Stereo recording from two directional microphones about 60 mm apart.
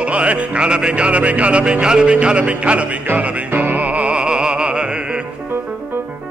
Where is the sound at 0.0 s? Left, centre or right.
Right.